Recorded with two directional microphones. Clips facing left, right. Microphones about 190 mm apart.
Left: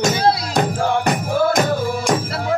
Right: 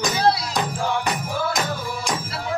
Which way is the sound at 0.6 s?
50° left (ahead or behind).